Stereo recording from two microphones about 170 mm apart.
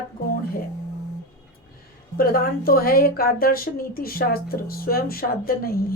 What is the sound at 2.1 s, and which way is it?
Speech, 60° left (ahead or behind).